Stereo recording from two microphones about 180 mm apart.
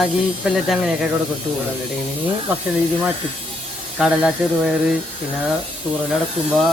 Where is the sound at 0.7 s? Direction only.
5° right (ahead or behind).